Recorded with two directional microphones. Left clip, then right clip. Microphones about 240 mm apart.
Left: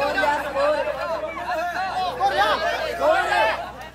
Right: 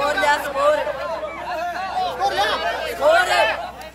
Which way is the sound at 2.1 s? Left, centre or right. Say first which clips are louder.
Left 2 dB; right.